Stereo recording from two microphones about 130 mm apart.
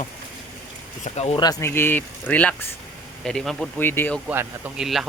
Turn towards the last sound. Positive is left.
turn(degrees=-5)  # may be behind; listen again after turning